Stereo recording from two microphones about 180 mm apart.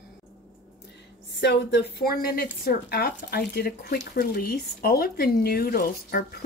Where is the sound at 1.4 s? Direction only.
65° left (ahead or behind).